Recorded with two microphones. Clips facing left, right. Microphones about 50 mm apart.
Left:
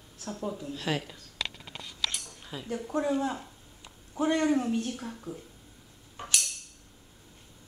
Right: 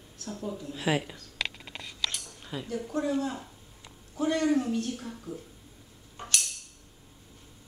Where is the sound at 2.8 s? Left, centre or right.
Centre.